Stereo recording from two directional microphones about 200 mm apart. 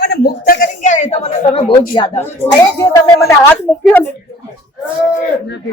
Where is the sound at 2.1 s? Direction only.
10° left (ahead or behind).